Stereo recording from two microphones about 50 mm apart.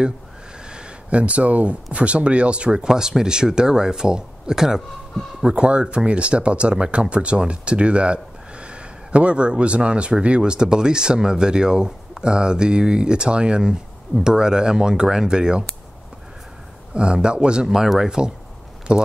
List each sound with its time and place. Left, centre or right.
0.7 s speech: centre
5.5 s speech: right
16.9 s speech: centre
17.6 s speech: centre